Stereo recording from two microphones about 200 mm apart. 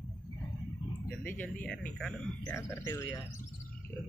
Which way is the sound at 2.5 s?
15° left (ahead or behind).